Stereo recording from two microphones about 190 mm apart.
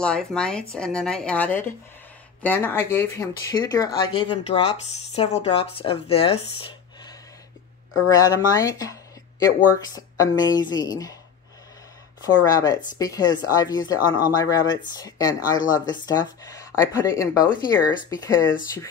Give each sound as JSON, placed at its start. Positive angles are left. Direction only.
{"t": 0.0, "sound": "speech", "side_deg": 5}
{"t": 7.9, "sound": "speech", "side_deg": 20}
{"t": 9.9, "sound": "speech", "side_deg": 20}
{"t": 12.4, "sound": "speech", "side_deg": 20}